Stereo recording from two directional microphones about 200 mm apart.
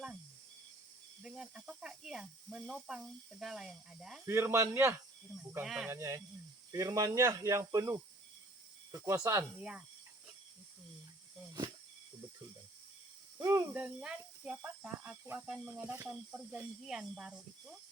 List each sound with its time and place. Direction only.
1.2 s speech: 5° right (ahead or behind)
4.3 s speech: 15° right (ahead or behind)
5.9 s speech: 15° right (ahead or behind)
13.4 s speech: 15° right (ahead or behind)
13.7 s speech: 5° right (ahead or behind)